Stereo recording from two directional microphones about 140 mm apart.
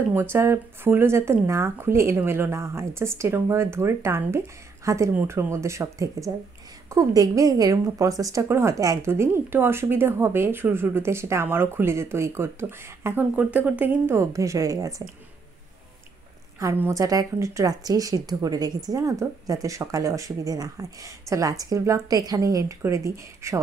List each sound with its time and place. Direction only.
0.1 s a woman's voice: 15° right (ahead or behind)
16.5 s a woman's voice: 20° right (ahead or behind)